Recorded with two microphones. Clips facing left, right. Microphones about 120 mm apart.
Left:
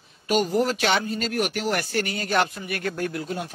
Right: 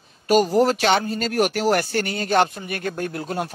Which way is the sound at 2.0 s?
30° right (ahead or behind).